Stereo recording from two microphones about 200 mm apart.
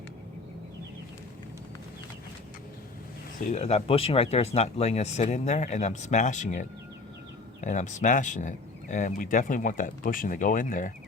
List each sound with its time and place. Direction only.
3.5 s speech: 35° left (ahead or behind)